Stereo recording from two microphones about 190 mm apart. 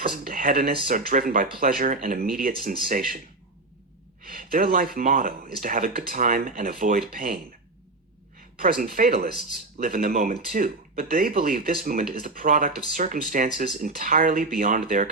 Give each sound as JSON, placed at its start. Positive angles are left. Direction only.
{"t": 0.0, "sound": "speech", "side_deg": -50}
{"t": 4.2, "sound": "speech", "side_deg": -50}
{"t": 8.5, "sound": "speech", "side_deg": -50}